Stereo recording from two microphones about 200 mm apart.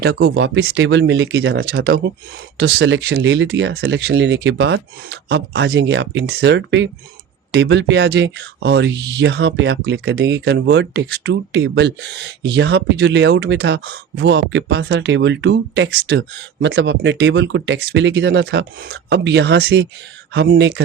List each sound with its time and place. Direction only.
0.0 s speech: 50° right (ahead or behind)
0.3 s speech: 75° right (ahead or behind)
2.6 s speech: 60° right (ahead or behind)